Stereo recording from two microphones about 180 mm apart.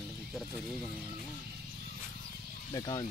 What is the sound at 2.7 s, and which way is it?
Speech, 25° left (ahead or behind).